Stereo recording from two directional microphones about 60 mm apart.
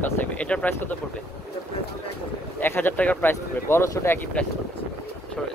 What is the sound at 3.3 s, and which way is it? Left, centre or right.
Speech, left.